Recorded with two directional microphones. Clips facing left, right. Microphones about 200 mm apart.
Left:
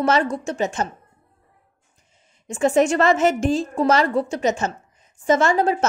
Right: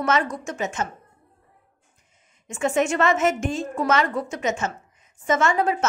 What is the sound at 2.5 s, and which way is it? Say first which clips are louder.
A woman's voice: left 5 dB; 35° left (ahead or behind).